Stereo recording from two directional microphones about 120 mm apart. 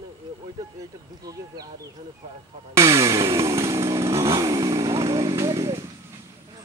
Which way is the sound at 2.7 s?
25° right (ahead or behind).